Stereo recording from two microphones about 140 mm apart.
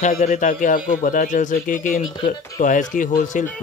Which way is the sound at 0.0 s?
70° left (ahead or behind).